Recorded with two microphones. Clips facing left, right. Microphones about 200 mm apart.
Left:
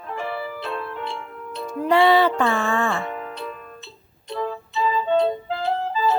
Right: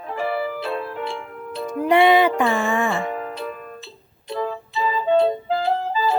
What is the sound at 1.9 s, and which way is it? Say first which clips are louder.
Music: right 1 dB; 20° right (ahead or behind).